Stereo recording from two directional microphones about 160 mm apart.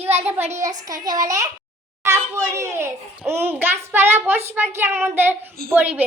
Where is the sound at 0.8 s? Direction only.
25° right (ahead or behind).